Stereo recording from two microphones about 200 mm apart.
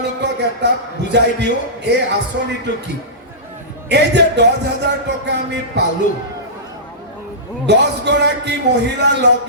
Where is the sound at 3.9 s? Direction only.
60° right (ahead or behind).